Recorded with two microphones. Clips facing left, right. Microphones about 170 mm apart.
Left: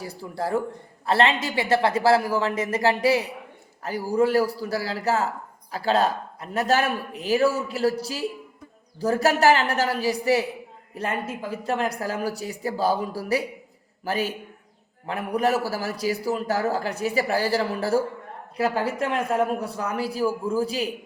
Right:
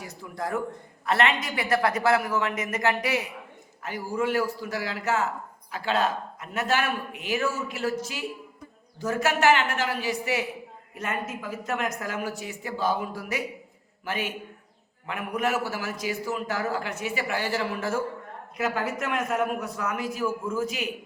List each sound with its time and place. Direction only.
0.0 s a man's voice: 35° left (ahead or behind)